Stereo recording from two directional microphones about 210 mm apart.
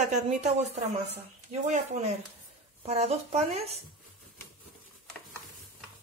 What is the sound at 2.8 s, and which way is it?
Speech, 30° right (ahead or behind).